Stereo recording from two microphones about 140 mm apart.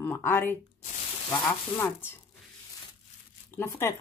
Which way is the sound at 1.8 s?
15° left (ahead or behind).